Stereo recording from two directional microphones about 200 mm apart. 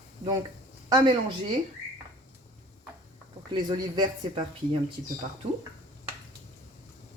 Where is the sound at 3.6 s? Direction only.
20° right (ahead or behind).